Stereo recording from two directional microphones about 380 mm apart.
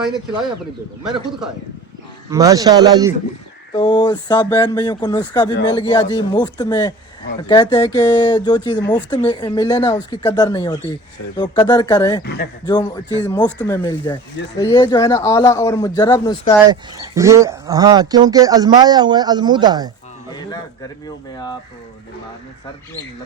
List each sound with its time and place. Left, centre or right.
2.3 s speech: centre
3.8 s speech: centre
12.2 s speech: left
12.6 s speech: centre
16.6 s speech: centre
20.3 s speech: centre